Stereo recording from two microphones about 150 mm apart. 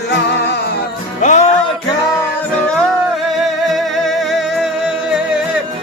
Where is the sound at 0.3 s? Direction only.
90° left.